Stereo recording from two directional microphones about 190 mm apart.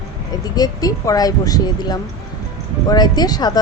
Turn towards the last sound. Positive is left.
turn(degrees=20)  # may be behind; listen again after turning